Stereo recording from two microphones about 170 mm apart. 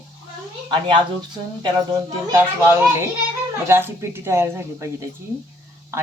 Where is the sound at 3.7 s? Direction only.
15° right (ahead or behind).